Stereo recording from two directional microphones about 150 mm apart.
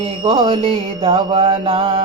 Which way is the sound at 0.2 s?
35° right (ahead or behind).